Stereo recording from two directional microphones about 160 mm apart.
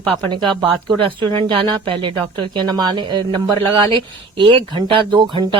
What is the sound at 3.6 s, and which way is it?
Speech, 30° right (ahead or behind).